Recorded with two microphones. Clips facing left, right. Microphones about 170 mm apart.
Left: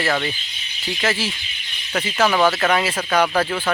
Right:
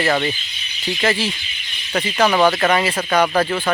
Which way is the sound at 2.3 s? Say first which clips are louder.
Right 2 dB; 15° right (ahead or behind).